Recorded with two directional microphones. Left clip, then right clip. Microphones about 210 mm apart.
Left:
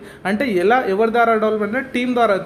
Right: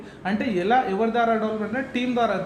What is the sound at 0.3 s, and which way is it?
A man's voice, 45° left (ahead or behind).